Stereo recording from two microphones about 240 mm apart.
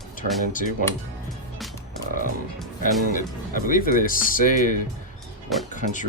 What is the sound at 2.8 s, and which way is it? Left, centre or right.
Speech, left.